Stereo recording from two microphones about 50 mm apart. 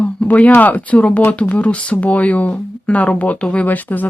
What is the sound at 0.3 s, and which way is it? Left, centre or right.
Speech, left.